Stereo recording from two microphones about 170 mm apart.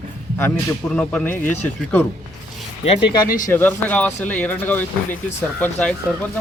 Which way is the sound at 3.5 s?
10° left (ahead or behind).